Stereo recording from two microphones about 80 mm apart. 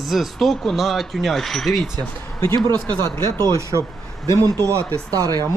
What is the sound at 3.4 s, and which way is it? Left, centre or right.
Speech, right.